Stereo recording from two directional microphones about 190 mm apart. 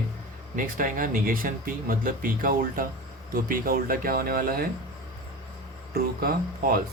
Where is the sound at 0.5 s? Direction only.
45° right (ahead or behind).